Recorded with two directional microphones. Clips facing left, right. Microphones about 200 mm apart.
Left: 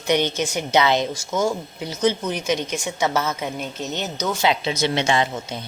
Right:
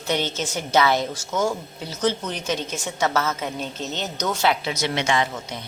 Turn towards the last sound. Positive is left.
turn(degrees=30)  # may be behind; listen again after turning